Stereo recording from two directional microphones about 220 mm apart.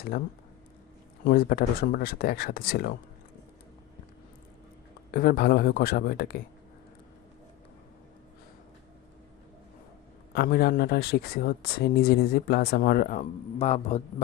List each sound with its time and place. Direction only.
1.2 s speech: 45° left (ahead or behind)
5.1 s speech: 45° left (ahead or behind)
10.3 s speech: 45° left (ahead or behind); by 14.0 s 30° left (ahead or behind)